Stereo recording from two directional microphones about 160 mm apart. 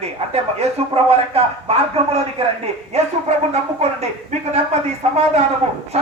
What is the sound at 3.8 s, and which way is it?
Speech, 45° right (ahead or behind).